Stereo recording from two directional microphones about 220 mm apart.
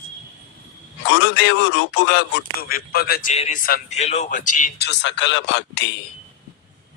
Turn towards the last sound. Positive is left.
turn(degrees=55)  # may be behind; listen again after turning